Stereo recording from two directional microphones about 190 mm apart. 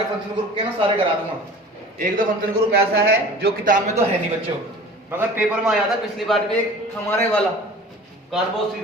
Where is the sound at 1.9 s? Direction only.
40° right (ahead or behind).